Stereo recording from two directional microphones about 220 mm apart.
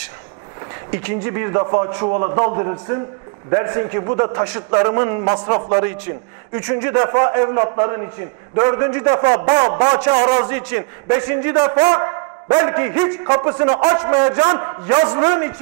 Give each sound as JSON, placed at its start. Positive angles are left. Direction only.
{"t": 0.9, "sound": "a man's voice", "side_deg": -15}
{"t": 9.1, "sound": "a man's voice", "side_deg": -30}